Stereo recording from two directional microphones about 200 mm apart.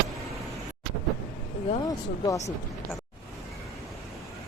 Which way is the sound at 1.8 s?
20° left (ahead or behind).